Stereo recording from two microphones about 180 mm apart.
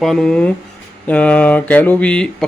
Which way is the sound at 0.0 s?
5° left (ahead or behind).